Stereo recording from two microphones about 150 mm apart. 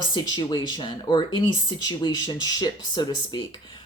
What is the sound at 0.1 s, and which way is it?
Speech, 30° left (ahead or behind).